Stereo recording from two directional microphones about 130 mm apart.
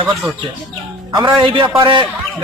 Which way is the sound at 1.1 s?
35° right (ahead or behind).